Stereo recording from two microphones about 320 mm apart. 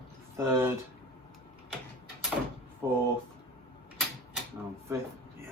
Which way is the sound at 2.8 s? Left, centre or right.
Centre.